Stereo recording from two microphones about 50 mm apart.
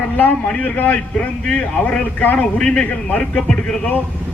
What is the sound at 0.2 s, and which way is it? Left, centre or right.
A man's voice, left.